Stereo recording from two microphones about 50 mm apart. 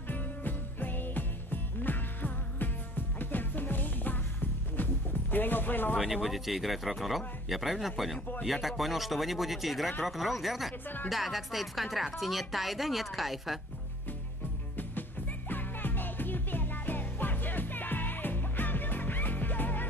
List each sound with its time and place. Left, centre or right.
0.1 s music: left
5.3 s speech: left
5.9 s speech: centre
14.8 s music: left